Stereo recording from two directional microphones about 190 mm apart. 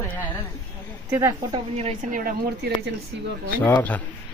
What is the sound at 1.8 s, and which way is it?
A woman's voice, 40° right (ahead or behind).